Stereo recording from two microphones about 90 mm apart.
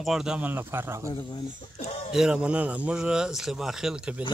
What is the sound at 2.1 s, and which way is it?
Speech, 10° right (ahead or behind).